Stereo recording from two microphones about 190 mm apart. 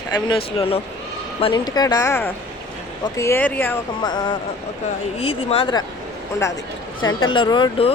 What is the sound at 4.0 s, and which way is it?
Speech, 20° left (ahead or behind).